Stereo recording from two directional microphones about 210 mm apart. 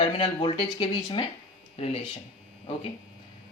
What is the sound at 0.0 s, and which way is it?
Speech, 25° left (ahead or behind).